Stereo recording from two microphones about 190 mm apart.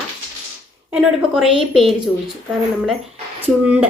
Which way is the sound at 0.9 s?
5° right (ahead or behind).